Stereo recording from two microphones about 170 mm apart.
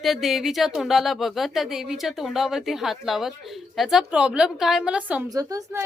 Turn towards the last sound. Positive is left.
turn(degrees=-20)  # may be behind; listen again after turning